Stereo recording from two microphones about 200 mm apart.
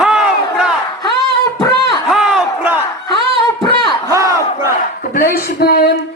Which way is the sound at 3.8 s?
15° right (ahead or behind).